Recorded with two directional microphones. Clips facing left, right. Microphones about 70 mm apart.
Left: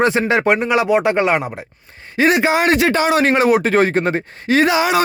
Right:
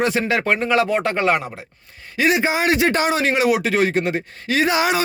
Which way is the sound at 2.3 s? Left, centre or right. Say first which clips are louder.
Left 3 dB; left.